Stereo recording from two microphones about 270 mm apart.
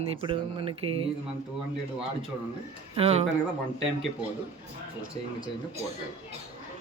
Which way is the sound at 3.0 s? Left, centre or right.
Right.